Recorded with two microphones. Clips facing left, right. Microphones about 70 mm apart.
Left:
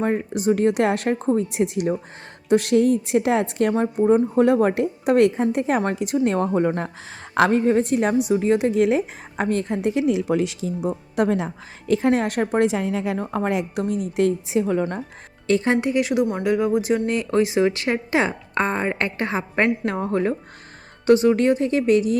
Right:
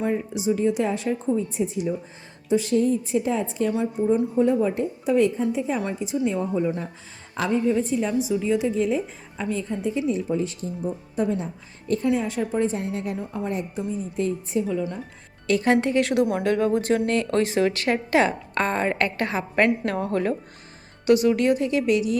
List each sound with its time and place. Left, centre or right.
0.0 s a woman's voice: left
3.7 s a woman's voice: left
7.3 s a woman's voice: left
7.6 s a woman's voice: left
13.1 s a woman's voice: left
15.4 s a woman's voice: left